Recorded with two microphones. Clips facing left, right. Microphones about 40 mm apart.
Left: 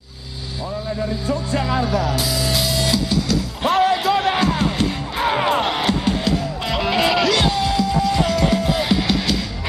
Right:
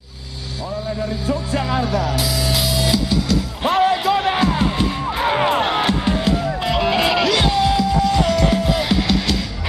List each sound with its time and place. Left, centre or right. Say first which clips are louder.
1.3 s music: even; centre